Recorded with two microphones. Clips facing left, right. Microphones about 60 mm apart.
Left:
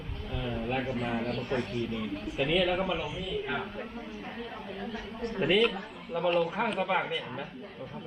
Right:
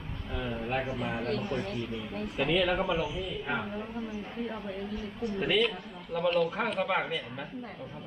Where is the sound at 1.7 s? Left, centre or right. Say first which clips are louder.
Left 2 dB; left.